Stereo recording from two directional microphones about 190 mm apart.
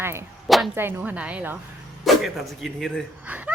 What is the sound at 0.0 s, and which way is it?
Speech, 15° right (ahead or behind).